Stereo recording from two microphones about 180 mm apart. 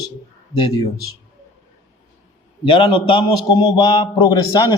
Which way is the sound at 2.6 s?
30° left (ahead or behind).